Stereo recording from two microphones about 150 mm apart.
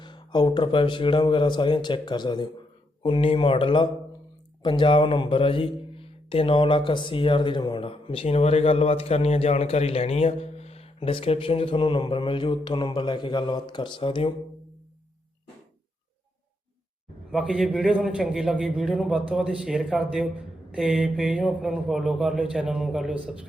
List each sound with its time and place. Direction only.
0.0 s a man's voice: 30° left (ahead or behind)
17.3 s a man's voice: 5° right (ahead or behind)